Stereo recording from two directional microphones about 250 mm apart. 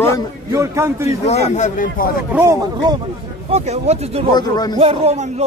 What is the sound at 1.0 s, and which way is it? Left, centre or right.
A man's voice, left.